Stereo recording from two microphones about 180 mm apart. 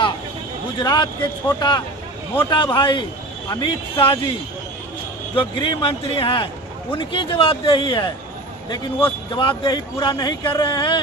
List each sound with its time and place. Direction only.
0.8 s a man's voice: 25° left (ahead or behind)
5.3 s a man's voice: 30° left (ahead or behind)